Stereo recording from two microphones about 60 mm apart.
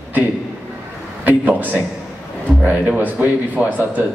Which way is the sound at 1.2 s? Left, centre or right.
Right.